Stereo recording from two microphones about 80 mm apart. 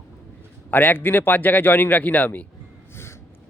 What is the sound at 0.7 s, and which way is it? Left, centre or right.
A man's voice, left.